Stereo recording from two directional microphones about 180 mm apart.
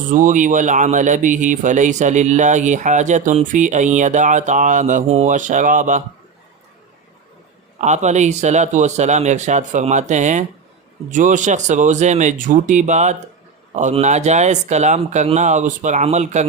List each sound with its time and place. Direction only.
0.1 s speech: 45° right (ahead or behind)
7.8 s speech: 40° right (ahead or behind)